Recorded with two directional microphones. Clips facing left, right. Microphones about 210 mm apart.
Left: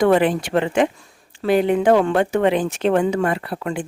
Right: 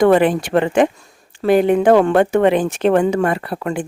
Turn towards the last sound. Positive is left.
turn(degrees=-50)  # may be behind; listen again after turning